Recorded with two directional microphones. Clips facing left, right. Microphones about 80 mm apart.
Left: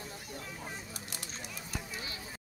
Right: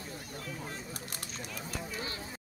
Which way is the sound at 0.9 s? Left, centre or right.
Right.